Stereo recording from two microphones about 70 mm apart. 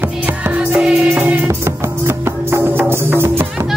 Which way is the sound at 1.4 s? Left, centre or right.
Right.